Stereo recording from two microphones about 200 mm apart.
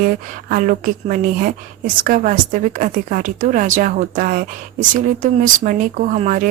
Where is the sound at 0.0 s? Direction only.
45° right (ahead or behind).